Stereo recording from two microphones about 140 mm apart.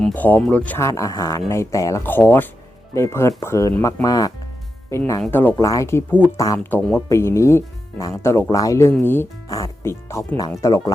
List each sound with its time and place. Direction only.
0.0 s speech: 10° left (ahead or behind)
5.5 s speech: 25° left (ahead or behind)
6.7 s speech: 15° left (ahead or behind)